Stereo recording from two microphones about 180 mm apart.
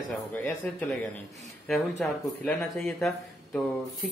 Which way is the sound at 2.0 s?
5° left (ahead or behind).